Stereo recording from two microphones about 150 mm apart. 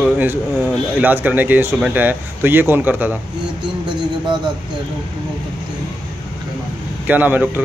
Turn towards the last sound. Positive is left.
turn(degrees=-10)  # may be behind; listen again after turning